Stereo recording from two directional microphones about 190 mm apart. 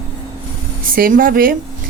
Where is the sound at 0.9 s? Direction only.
50° right (ahead or behind).